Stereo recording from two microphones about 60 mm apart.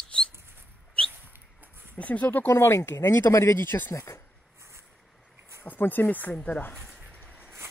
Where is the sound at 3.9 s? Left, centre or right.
Left.